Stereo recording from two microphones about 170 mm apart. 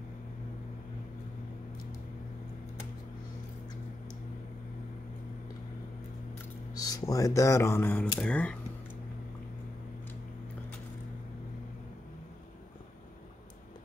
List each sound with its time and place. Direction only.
6.7 s speech: 20° left (ahead or behind)